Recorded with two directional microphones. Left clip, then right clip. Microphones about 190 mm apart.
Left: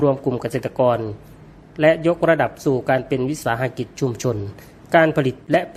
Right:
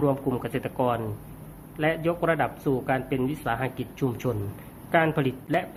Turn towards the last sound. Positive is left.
turn(degrees=40)  # may be behind; listen again after turning